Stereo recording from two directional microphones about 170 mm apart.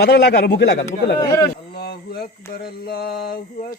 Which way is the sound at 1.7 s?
65° left (ahead or behind).